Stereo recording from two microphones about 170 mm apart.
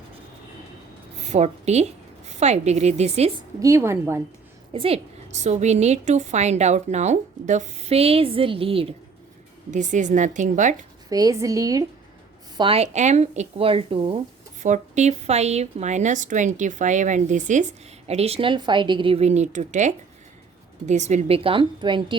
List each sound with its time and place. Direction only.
1.2 s a woman's voice: 40° right (ahead or behind)
3.6 s a woman's voice: 15° right (ahead or behind)
4.7 s a woman's voice: 35° right (ahead or behind)
9.7 s a woman's voice: 45° right (ahead or behind)
11.1 s speech: 20° right (ahead or behind)
12.5 s a woman's voice: 35° right (ahead or behind)
14.6 s a woman's voice: 45° right (ahead or behind); by 22.2 s 30° right (ahead or behind)